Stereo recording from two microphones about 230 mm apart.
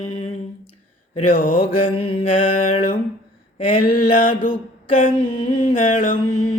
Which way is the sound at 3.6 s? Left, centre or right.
Left.